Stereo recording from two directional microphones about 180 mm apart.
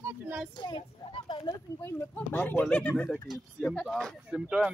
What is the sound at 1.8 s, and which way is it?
Speech, 10° left (ahead or behind).